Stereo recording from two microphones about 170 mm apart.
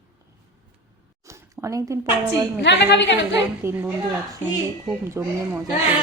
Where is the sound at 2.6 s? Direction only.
90° left.